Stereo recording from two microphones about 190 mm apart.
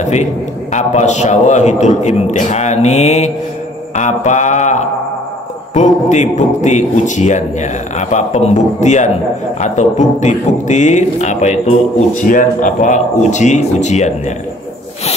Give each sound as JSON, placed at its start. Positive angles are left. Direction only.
{"t": 0.0, "sound": "a man's voice", "side_deg": 35}